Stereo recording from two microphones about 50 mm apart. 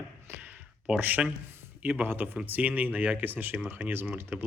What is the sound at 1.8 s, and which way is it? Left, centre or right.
Speech, right.